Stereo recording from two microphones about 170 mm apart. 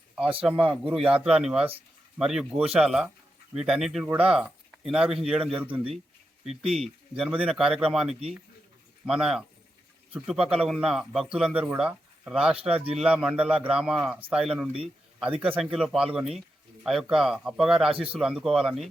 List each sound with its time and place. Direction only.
0.7 s speech: 5° right (ahead or behind)
5.5 s speech: 30° right (ahead or behind)
5.7 s a man's voice: 5° right (ahead or behind)